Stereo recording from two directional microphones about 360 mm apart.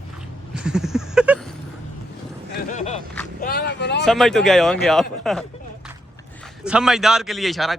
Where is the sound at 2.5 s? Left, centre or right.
Left.